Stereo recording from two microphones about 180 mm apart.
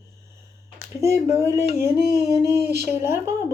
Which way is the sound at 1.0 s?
15° right (ahead or behind).